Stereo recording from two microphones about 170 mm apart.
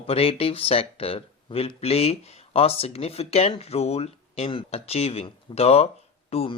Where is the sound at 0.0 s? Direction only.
35° left (ahead or behind).